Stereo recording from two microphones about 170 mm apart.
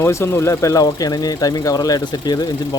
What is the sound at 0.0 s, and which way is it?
Speech, 15° left (ahead or behind).